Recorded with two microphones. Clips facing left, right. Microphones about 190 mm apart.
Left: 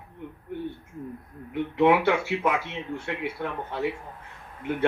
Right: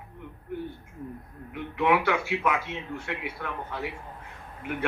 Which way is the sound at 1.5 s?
25° left (ahead or behind).